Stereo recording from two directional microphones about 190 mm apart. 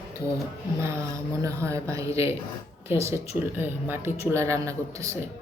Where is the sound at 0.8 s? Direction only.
15° right (ahead or behind).